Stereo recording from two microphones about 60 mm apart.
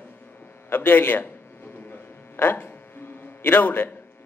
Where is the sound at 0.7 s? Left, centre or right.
Left.